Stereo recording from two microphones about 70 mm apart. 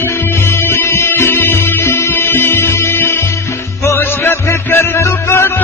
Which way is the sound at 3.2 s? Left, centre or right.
Left.